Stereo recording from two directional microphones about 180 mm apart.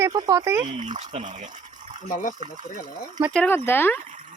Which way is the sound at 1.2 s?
40° right (ahead or behind).